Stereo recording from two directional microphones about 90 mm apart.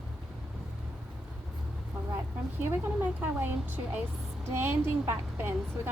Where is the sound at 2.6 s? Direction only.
25° right (ahead or behind).